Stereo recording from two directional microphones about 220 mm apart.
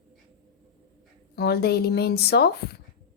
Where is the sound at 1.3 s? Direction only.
45° left (ahead or behind).